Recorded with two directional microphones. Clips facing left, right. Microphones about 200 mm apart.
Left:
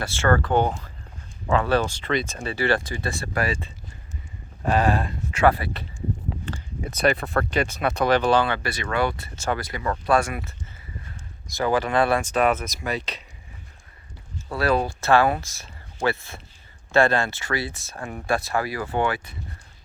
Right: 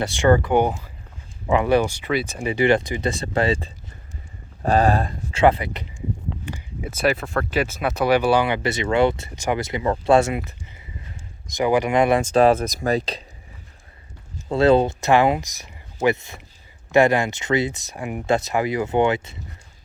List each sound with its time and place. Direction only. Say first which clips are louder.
0.0 s speech: right 4 dB; 15° right (ahead or behind)
4.6 s speech: right 3 dB; 40° right (ahead or behind)
5.4 s speech: right 3 dB; 20° right (ahead or behind)
11.4 s speech: right 4 dB; 15° right (ahead or behind); by 13.2 s 35° right (ahead or behind)
14.5 s speech: right 7 dB; 25° right (ahead or behind)